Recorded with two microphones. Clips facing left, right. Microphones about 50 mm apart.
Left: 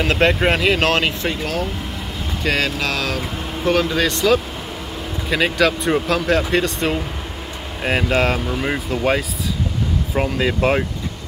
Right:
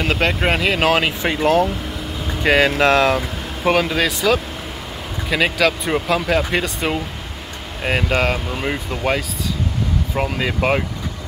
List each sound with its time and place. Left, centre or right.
0.0 s speech: centre
1.2 s speech: right
2.8 s speech: right
3.7 s speech: centre